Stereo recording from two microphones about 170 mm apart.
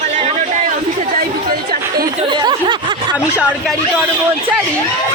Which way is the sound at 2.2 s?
30° right (ahead or behind).